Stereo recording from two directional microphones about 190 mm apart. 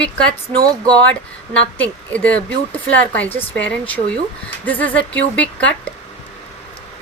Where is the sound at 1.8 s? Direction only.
5° left (ahead or behind).